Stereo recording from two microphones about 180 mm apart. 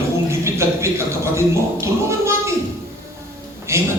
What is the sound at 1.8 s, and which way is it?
Speech, 15° right (ahead or behind).